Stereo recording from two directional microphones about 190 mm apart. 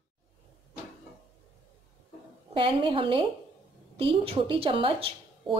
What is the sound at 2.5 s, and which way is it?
Speech, 25° right (ahead or behind).